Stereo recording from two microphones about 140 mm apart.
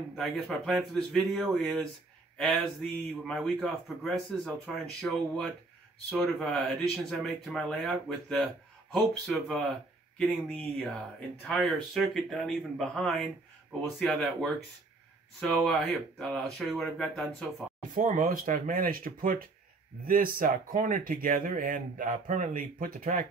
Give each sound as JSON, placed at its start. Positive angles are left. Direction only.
{"t": 0.1, "sound": "speech", "side_deg": 0}
{"t": 17.9, "sound": "speech", "side_deg": -70}